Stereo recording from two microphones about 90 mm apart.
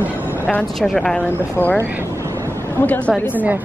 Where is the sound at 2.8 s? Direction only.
20° left (ahead or behind).